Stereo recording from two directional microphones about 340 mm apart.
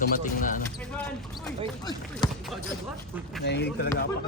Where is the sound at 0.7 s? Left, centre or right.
Centre.